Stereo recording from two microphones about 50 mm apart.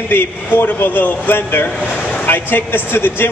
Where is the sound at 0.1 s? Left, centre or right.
Left.